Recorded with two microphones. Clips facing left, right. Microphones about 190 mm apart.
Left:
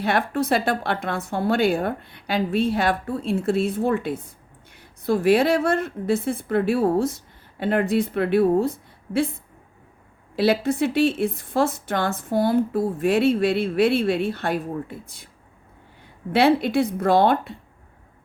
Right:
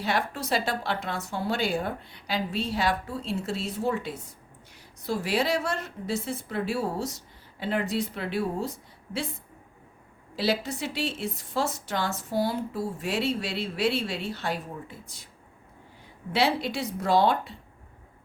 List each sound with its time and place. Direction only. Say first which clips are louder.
0.0 s a woman's voice: left 7 dB; 55° left (ahead or behind)
10.3 s a woman's voice: left 8 dB; 55° left (ahead or behind)
16.3 s a woman's voice: left 8 dB; 55° left (ahead or behind)